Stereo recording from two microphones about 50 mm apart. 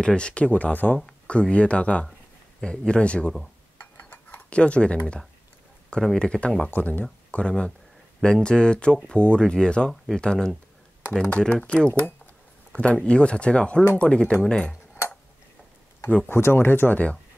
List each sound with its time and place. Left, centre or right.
0.0 s speech: centre
0.9 s speech: centre
4.5 s speech: left
6.7 s speech: left; by 14.7 s centre
16.3 s speech: left